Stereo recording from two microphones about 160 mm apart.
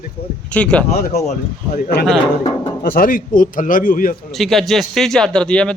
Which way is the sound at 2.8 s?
65° left (ahead or behind).